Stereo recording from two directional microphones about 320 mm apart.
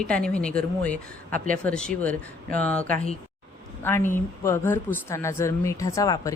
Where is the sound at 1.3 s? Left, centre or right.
Right.